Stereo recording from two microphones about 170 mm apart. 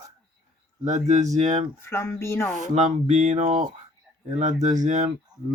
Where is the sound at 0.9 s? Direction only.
45° right (ahead or behind).